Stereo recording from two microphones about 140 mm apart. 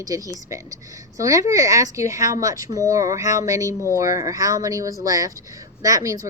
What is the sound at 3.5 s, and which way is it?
Speech, 20° right (ahead or behind).